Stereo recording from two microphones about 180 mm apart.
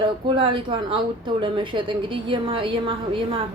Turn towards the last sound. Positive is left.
turn(degrees=-30)  # may be behind; listen again after turning